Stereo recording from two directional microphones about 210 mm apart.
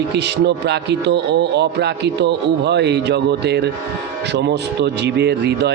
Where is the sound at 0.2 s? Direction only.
55° right (ahead or behind).